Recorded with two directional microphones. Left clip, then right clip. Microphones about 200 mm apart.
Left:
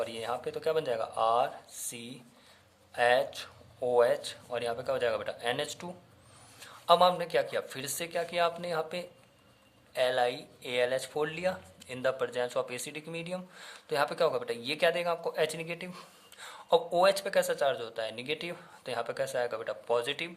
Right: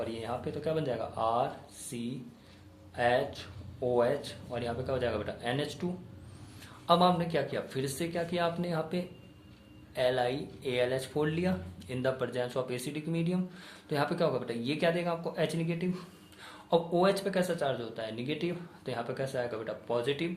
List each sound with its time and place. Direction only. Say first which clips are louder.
0.0 s speech: left 2 dB; 40° left (ahead or behind)